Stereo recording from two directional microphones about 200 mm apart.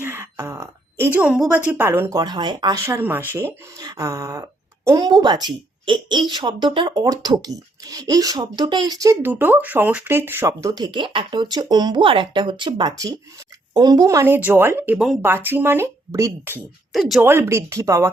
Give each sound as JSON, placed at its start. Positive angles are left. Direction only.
{"t": 0.0, "sound": "a woman's voice", "side_deg": -10}
{"t": 16.9, "sound": "speech", "side_deg": 0}
{"t": 17.2, "sound": "a woman's voice", "side_deg": -10}